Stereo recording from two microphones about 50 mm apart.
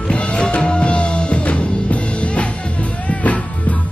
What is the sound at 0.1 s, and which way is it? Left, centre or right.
Music, left.